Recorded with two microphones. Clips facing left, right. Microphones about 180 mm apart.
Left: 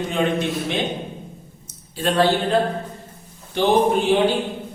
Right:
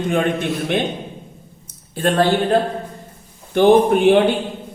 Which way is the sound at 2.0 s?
55° right (ahead or behind).